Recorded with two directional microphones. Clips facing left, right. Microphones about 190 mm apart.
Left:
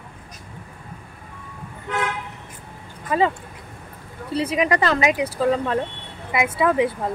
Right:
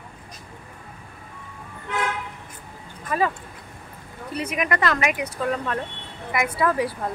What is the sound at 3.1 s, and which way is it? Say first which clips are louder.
Speech: left 3 dB; 20° left (ahead or behind).